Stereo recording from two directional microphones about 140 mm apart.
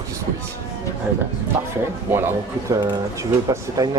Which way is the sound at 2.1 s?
15° right (ahead or behind).